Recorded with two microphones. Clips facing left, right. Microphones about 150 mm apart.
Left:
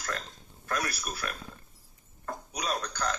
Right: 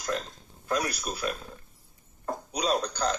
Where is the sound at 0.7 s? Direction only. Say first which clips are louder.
Right 4 dB; 20° right (ahead or behind).